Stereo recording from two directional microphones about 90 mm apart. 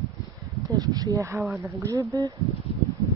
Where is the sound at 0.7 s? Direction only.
40° right (ahead or behind).